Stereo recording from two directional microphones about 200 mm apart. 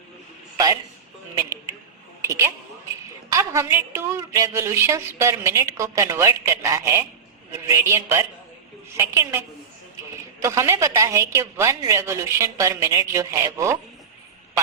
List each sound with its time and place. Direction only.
0.5 s a sound: 15° right (ahead or behind)
3.3 s a woman's voice: 15° right (ahead or behind)
10.4 s a woman's voice: 15° right (ahead or behind)